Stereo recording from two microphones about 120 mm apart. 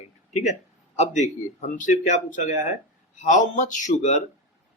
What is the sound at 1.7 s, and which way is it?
Speech, 90° left.